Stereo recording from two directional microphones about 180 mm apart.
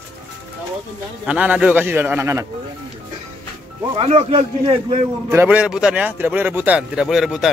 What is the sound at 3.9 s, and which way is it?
Speech, 30° right (ahead or behind).